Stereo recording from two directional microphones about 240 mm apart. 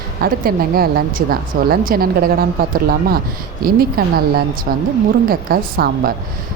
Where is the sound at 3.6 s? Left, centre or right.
Right.